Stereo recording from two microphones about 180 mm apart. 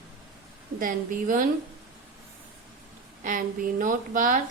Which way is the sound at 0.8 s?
50° right (ahead or behind).